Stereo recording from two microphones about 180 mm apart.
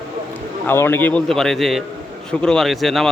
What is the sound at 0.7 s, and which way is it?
A man's voice, 10° left (ahead or behind).